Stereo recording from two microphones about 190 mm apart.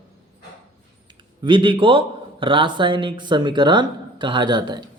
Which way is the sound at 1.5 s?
25° right (ahead or behind).